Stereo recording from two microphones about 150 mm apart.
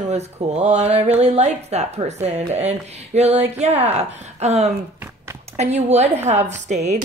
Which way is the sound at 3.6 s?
45° right (ahead or behind).